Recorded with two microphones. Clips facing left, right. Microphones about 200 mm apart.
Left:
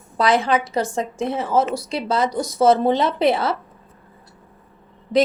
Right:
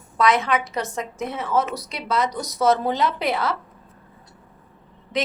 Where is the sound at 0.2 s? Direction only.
30° left (ahead or behind).